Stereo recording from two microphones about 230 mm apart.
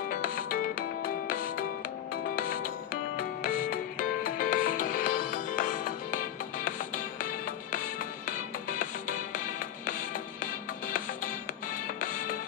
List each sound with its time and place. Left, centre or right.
0.1 s music: left